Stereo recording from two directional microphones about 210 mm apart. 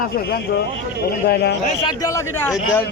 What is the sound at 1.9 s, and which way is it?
Speech, 15° left (ahead or behind).